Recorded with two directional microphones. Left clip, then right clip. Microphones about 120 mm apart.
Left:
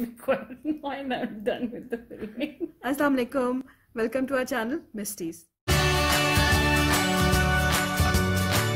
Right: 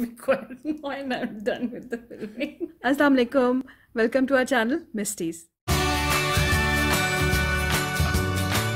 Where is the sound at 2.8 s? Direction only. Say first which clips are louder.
Right 5 dB; 30° right (ahead or behind).